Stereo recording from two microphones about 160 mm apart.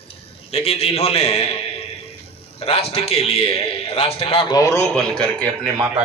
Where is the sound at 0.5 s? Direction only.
40° left (ahead or behind).